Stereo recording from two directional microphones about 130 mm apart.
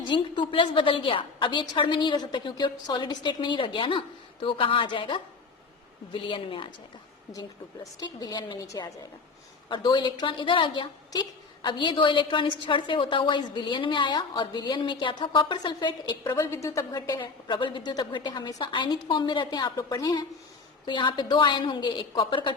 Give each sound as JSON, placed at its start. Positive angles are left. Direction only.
{"t": 0.1, "sound": "a woman's voice", "side_deg": 35}
{"t": 6.2, "sound": "a woman's voice", "side_deg": 40}
{"t": 7.9, "sound": "a woman's voice", "side_deg": 30}
{"t": 16.5, "sound": "a woman's voice", "side_deg": 25}